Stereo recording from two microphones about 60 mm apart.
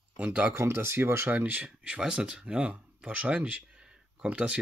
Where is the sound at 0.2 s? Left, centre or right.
Right.